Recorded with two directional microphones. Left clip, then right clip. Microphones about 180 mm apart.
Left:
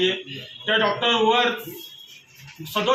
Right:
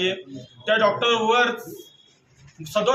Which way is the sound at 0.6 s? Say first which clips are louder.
Right 1 dB; 25° right (ahead or behind).